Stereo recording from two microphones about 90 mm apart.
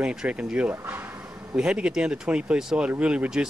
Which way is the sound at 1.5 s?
10° right (ahead or behind).